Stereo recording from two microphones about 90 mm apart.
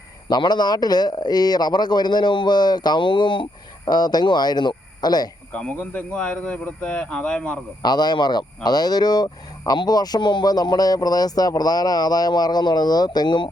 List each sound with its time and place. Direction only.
0.3 s speech: 50° left (ahead or behind)
5.5 s a man's voice: 15° left (ahead or behind)
7.8 s speech: 50° left (ahead or behind)